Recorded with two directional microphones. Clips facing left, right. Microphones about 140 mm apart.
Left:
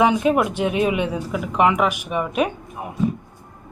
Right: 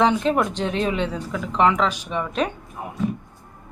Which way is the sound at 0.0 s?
10° left (ahead or behind).